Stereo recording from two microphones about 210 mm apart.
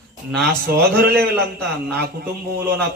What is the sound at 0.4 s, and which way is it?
A man's voice, 50° right (ahead or behind).